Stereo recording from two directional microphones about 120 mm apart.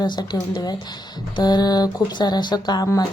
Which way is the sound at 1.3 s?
35° left (ahead or behind).